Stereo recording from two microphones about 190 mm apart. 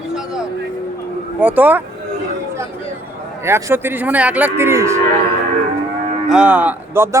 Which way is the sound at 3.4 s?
15° right (ahead or behind).